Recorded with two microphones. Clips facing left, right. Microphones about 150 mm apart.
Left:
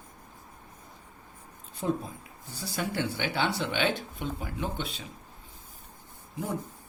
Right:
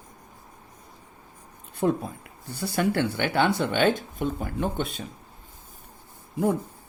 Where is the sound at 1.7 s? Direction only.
60° right (ahead or behind).